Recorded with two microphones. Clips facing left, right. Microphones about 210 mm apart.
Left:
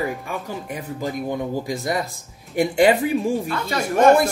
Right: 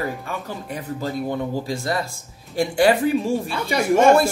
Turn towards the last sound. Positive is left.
turn(degrees=-10)  # may be behind; listen again after turning